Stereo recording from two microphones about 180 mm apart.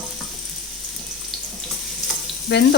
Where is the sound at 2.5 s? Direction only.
70° left (ahead or behind).